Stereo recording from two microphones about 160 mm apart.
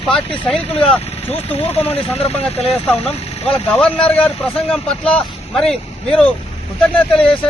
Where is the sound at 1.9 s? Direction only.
40° left (ahead or behind).